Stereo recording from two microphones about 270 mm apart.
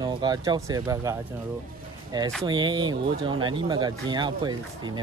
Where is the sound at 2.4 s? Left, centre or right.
Centre.